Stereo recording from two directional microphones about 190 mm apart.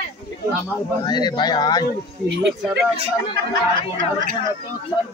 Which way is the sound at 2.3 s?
70° right (ahead or behind).